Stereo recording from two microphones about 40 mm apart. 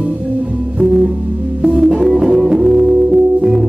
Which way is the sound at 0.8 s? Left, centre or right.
Centre.